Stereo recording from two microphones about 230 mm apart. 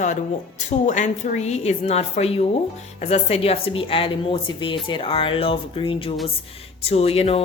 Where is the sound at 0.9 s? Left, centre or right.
Left.